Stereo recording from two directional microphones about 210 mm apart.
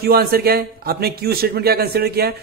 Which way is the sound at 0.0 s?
45° right (ahead or behind).